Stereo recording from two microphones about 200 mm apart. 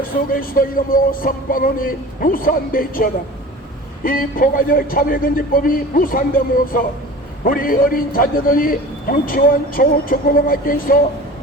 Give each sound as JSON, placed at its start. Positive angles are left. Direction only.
{"t": 0.3, "sound": "a man's voice", "side_deg": 45}